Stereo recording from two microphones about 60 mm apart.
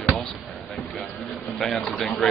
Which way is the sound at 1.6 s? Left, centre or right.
Centre.